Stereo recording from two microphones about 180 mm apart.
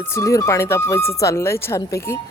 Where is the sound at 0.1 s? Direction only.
15° left (ahead or behind).